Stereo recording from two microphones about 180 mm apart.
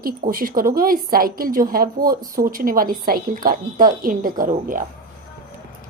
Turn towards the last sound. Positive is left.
turn(degrees=-50)  # may be behind; listen again after turning